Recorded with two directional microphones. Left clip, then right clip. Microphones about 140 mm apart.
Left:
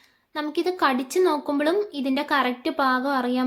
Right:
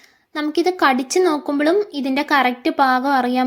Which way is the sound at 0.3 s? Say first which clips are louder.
Right 6 dB; 35° right (ahead or behind).